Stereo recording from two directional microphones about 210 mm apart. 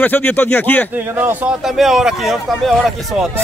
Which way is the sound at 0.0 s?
10° left (ahead or behind).